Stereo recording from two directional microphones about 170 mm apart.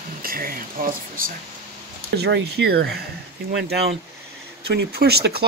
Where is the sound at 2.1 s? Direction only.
75° right (ahead or behind).